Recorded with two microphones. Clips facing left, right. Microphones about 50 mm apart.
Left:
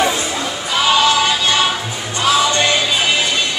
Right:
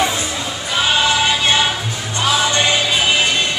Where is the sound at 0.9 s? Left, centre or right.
Right.